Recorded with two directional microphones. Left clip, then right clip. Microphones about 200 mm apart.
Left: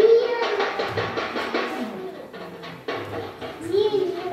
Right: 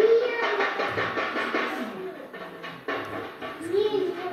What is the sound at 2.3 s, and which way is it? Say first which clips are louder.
Music: left 1 dB; 20° right (ahead or behind).